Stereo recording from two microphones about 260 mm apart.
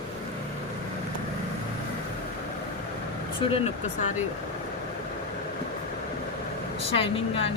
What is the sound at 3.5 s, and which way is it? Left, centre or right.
Speech, left.